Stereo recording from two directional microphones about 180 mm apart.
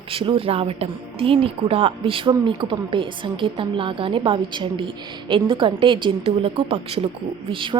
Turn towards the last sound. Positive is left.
turn(degrees=-30)  # may be behind; listen again after turning